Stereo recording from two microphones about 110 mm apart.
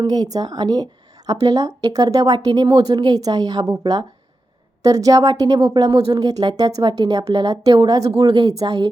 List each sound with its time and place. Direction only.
0.0 s speech: 35° right (ahead or behind)